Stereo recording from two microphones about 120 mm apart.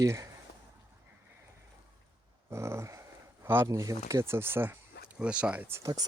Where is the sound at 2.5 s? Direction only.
25° right (ahead or behind).